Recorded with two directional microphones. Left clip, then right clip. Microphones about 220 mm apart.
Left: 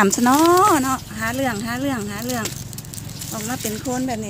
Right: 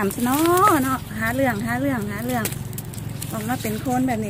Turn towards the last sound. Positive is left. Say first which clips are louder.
# right 2 dB
turn(degrees=20)  # may be behind; listen again after turning